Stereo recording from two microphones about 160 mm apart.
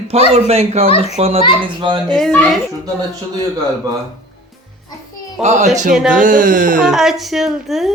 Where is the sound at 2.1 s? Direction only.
5° left (ahead or behind).